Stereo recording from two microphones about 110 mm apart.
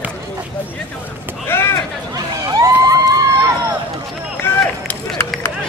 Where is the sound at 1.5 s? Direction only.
20° left (ahead or behind).